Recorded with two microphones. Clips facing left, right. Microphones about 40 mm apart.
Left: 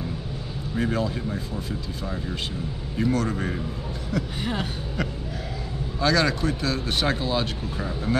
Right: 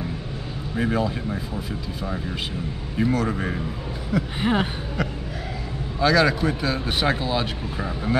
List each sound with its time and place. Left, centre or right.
0.7 s speech: centre
4.4 s speech: right
5.9 s speech: centre